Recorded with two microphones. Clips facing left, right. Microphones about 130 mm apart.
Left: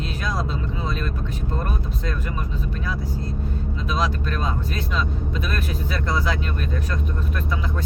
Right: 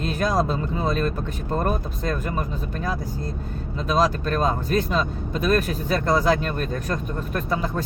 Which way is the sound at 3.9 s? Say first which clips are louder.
Right 5 dB; 40° right (ahead or behind).